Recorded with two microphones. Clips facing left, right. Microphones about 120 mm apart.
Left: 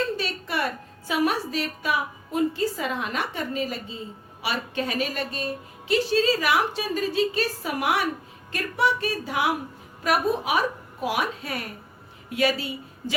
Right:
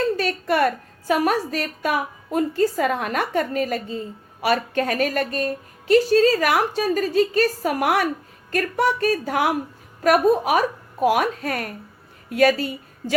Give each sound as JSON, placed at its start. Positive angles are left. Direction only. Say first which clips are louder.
{"t": 0.2, "sound": "a woman's voice", "louder": "right 8 dB", "side_deg": -50}